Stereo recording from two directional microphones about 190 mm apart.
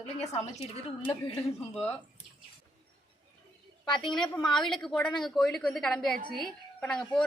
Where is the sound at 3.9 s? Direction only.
25° left (ahead or behind).